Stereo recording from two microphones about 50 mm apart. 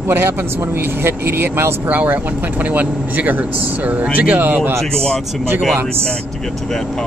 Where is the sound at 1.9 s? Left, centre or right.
Right.